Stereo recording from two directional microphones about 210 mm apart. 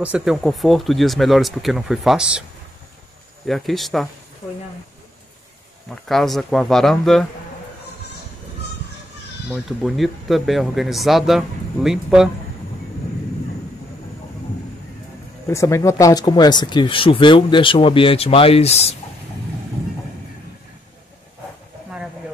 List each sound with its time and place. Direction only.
0.0 s speech: 5° right (ahead or behind)
3.4 s speech: centre (ahead or behind)
6.0 s speech: centre (ahead or behind)
9.5 s speech: centre (ahead or behind)
15.4 s speech: 15° left (ahead or behind); by 18.9 s 30° left (ahead or behind)